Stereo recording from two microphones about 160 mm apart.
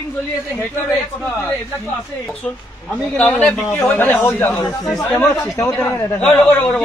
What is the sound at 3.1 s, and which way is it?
Speech, 10° left (ahead or behind).